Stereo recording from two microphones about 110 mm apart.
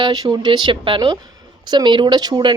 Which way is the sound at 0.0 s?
40° right (ahead or behind).